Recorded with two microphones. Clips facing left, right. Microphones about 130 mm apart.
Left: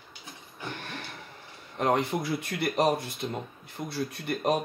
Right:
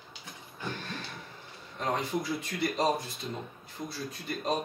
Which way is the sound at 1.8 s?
65° left (ahead or behind).